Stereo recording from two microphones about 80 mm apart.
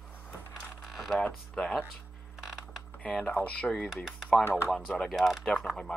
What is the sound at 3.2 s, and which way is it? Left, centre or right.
Speech, left.